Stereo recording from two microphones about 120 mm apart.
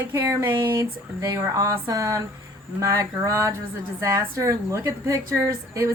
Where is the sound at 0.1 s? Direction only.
25° right (ahead or behind).